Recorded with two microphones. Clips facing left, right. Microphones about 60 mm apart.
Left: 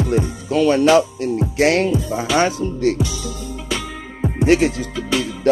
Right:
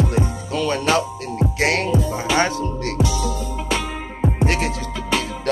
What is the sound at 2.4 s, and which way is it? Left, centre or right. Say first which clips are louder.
Speech: left 5 dB; centre.